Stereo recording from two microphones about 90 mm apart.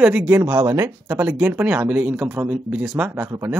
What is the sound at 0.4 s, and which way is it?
Speech, 30° right (ahead or behind).